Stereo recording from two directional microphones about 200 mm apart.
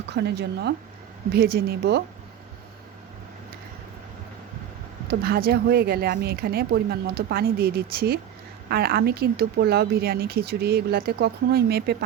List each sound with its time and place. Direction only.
0.0 s speech: 55° right (ahead or behind)
5.0 s speech: 50° right (ahead or behind)